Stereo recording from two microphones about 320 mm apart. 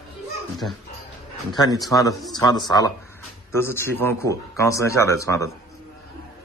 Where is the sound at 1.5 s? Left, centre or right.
Centre.